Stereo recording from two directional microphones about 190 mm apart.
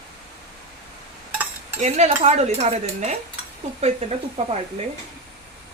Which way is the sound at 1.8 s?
35° right (ahead or behind).